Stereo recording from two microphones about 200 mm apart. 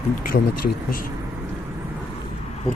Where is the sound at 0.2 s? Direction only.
45° left (ahead or behind).